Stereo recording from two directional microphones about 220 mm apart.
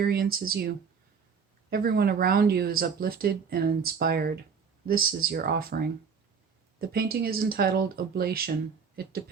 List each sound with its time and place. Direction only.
0.0 s speech: 45° right (ahead or behind)
1.7 s speech: 45° right (ahead or behind)